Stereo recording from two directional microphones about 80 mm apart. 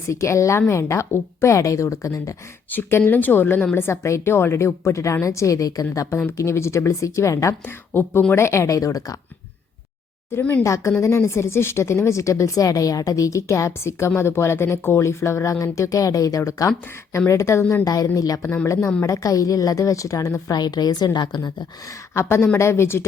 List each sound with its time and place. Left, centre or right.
0.1 s speech: left
2.6 s a woman's voice: left
7.6 s a woman's voice: left
10.6 s speech: left
17.8 s a woman's voice: left
18.4 s a woman's voice: left
22.1 s speech: left